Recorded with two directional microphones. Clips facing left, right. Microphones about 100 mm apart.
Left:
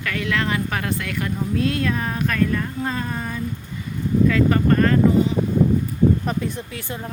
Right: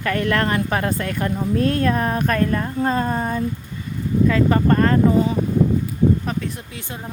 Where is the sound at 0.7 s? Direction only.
35° right (ahead or behind).